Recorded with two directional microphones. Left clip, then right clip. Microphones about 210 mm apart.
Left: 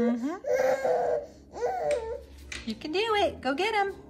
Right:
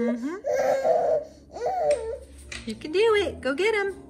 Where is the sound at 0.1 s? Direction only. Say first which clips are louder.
Right 1 dB; 15° left (ahead or behind).